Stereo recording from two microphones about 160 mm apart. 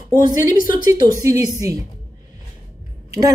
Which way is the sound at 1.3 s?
20° right (ahead or behind).